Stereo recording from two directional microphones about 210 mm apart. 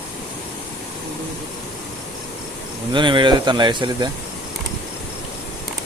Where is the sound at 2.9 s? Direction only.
20° right (ahead or behind).